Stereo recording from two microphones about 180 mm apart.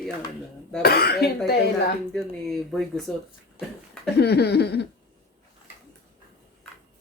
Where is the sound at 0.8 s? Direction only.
60° left (ahead or behind).